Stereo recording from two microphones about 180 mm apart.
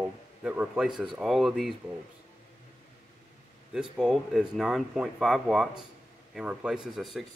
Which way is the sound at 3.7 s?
5° right (ahead or behind).